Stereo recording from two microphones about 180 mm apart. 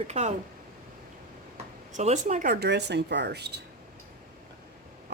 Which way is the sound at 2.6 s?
70° right (ahead or behind).